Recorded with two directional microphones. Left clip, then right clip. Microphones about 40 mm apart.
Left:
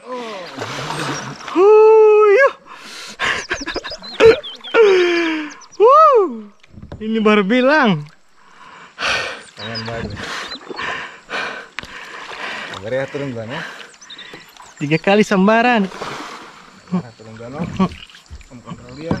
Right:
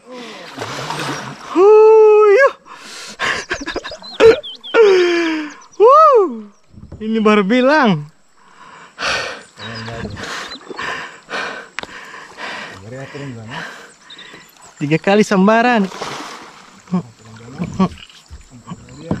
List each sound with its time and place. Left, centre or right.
0.1 s a sound: centre
7.0 s speech: centre
8.9 s a sound: centre
12.4 s rowboat: centre
13.0 s a sound: centre
14.8 s speech: centre
15.8 s boat: right
16.9 s speech: right
18.7 s rowboat: right